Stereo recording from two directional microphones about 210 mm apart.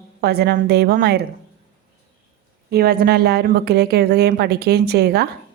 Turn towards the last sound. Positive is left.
turn(degrees=-50)  # may be behind; listen again after turning